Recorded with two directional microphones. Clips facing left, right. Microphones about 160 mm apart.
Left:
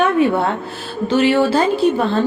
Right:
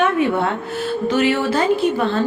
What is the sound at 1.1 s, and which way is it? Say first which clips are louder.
Speech: left 5 dB; 30° left (ahead or behind).